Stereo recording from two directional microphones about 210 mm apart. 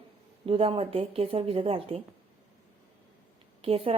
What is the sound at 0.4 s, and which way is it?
A woman's voice, 25° right (ahead or behind).